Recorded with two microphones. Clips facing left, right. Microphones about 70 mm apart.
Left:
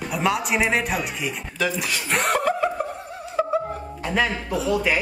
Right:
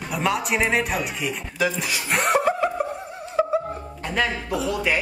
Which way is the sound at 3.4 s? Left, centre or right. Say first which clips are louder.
Right 2 dB; centre.